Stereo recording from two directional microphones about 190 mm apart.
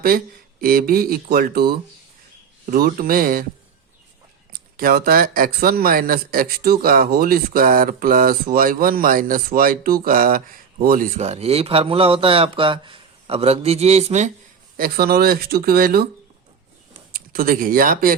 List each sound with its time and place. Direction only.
0.6 s speech: 50° right (ahead or behind)
4.5 s speech: 55° right (ahead or behind); by 14.3 s 35° right (ahead or behind)
14.8 s speech: 50° right (ahead or behind)
17.1 s speech: 50° right (ahead or behind)